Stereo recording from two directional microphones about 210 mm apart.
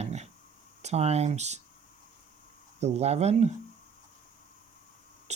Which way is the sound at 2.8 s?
30° right (ahead or behind).